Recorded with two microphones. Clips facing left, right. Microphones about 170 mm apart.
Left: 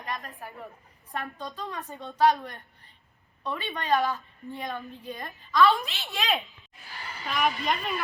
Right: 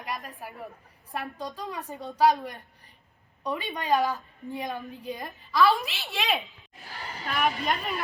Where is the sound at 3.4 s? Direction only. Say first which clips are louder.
Right 2 dB; 15° right (ahead or behind).